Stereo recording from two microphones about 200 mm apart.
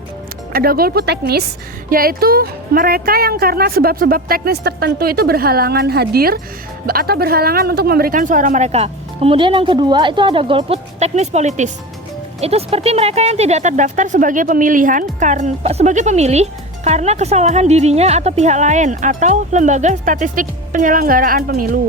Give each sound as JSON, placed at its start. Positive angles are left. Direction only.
{"t": 0.5, "sound": "speech", "side_deg": -50}